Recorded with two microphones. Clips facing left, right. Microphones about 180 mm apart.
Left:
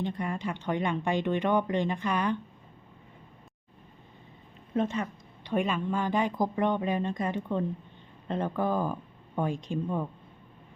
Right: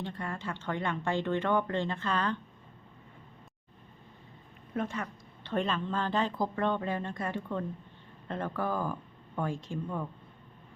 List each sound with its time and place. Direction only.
0.0 s a woman's voice: 15° left (ahead or behind)
4.7 s a woman's voice: 20° left (ahead or behind)